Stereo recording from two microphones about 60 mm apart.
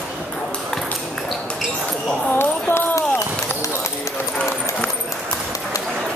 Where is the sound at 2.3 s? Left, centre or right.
Left.